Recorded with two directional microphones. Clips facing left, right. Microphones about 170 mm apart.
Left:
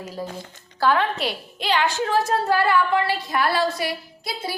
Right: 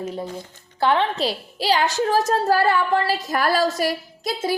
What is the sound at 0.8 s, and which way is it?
A woman's voice, 25° right (ahead or behind).